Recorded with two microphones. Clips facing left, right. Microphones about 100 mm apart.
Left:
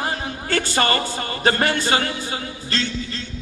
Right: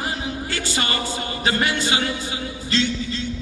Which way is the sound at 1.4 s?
45° left (ahead or behind).